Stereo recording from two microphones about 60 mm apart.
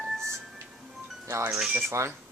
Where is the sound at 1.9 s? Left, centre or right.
Right.